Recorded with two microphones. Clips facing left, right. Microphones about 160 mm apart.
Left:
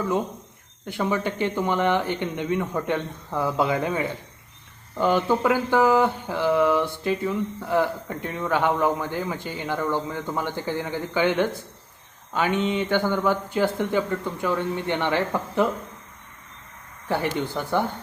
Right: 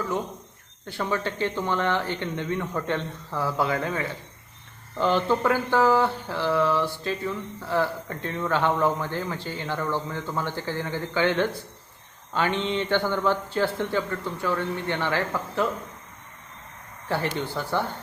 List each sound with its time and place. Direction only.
0.9 s speech: 15° left (ahead or behind)
17.1 s speech: 15° left (ahead or behind)